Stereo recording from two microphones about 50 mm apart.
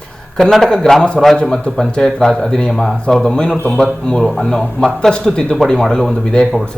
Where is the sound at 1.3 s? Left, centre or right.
Centre.